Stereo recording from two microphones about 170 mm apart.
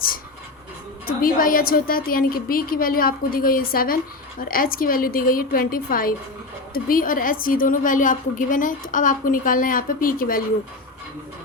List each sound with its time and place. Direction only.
1.0 s a woman's voice: 55° left (ahead or behind)